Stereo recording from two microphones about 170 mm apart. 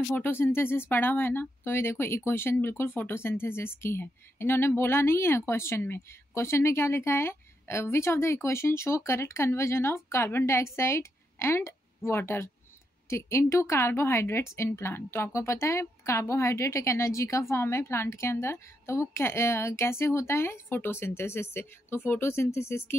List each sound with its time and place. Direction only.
0.1 s speech: 10° left (ahead or behind)